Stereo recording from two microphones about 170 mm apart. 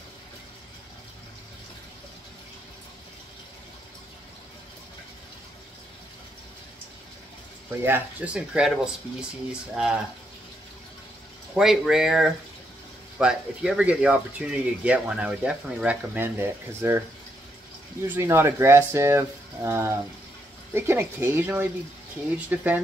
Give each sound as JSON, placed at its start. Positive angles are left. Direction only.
{"t": 7.8, "sound": "speech", "side_deg": -10}
{"t": 11.5, "sound": "speech", "side_deg": 0}
{"t": 18.0, "sound": "speech", "side_deg": -15}